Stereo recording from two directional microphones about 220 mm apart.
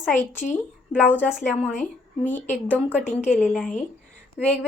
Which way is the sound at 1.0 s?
10° left (ahead or behind).